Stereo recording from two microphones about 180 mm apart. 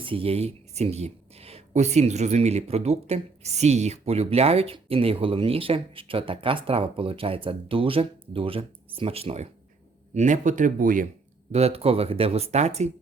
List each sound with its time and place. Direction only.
0.0 s speech: 30° right (ahead or behind); by 11.1 s 50° right (ahead or behind)
11.5 s speech: 35° right (ahead or behind)